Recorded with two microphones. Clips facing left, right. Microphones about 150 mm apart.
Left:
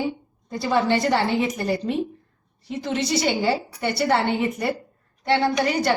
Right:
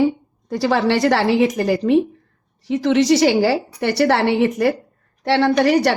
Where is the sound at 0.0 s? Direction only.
90° right.